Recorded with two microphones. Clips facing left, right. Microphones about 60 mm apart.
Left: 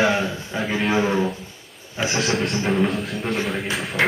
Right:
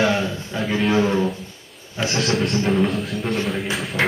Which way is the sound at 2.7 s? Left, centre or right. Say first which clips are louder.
Right 1 dB; centre.